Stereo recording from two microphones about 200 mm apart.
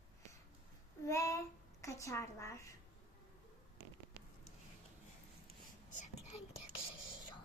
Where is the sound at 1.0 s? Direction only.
15° left (ahead or behind).